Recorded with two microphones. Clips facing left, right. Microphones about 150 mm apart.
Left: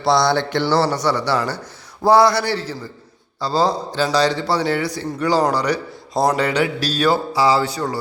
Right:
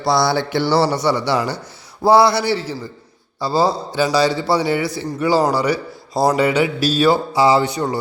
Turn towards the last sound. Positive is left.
turn(degrees=-20)  # may be behind; listen again after turning